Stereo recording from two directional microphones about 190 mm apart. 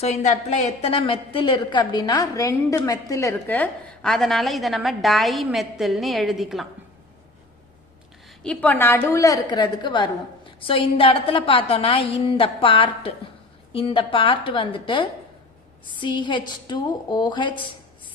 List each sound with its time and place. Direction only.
0.0 s a woman's voice: 35° left (ahead or behind); by 6.7 s centre (ahead or behind)
8.4 s a woman's voice: 10° left (ahead or behind); by 17.7 s 25° left (ahead or behind)